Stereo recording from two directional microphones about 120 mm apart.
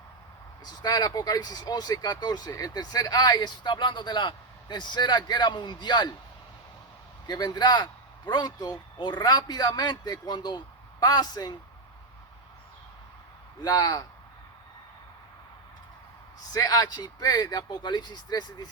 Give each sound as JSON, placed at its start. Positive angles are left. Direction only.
{"t": 0.6, "sound": "speech", "side_deg": 35}
{"t": 7.3, "sound": "speech", "side_deg": 35}
{"t": 13.6, "sound": "speech", "side_deg": 30}
{"t": 16.5, "sound": "speech", "side_deg": 30}